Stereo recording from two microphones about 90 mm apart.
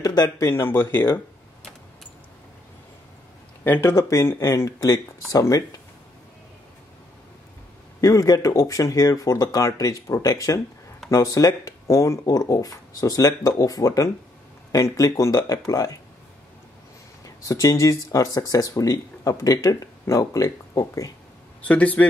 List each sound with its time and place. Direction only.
0.0 s a sound: 50° left (ahead or behind)
0.4 s speech: 25° left (ahead or behind)
3.6 s speech: 20° left (ahead or behind)
3.9 s speech: 35° left (ahead or behind)
8.0 s speech: 40° left (ahead or behind)
17.2 s speech: 40° left (ahead or behind)
21.6 s a man's voice: 15° left (ahead or behind)